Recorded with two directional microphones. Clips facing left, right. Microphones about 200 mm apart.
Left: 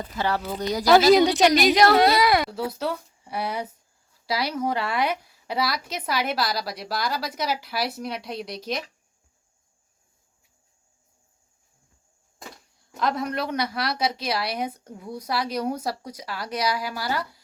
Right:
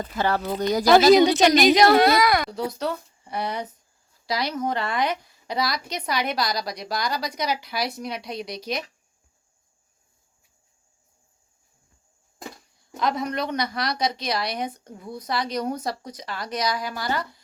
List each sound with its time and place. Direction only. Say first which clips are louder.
0.2 s speech: right 2 dB; 50° right (ahead or behind)
1.1 s a woman's voice: right 1 dB; 5° left (ahead or behind)
13.0 s speech: right 1 dB; 5° left (ahead or behind)